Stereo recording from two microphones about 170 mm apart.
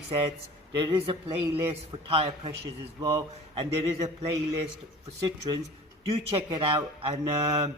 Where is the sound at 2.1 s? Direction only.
35° right (ahead or behind).